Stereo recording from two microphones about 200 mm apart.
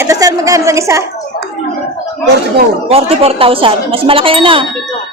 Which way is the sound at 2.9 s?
30° right (ahead or behind).